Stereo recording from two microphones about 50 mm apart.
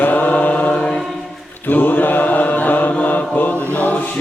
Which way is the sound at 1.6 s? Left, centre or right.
Left.